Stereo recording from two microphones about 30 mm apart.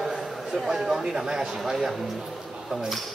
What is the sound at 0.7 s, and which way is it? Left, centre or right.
Speech, centre.